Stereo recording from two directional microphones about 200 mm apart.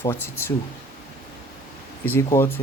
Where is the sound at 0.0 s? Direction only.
10° left (ahead or behind).